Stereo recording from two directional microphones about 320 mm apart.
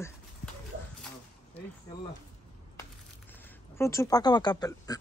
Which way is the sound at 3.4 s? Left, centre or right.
Centre.